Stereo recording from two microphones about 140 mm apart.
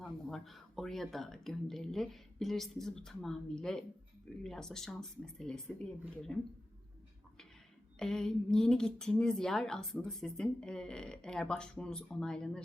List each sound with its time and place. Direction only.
0.0 s a woman's voice: centre (ahead or behind)
7.9 s a woman's voice: 5° left (ahead or behind)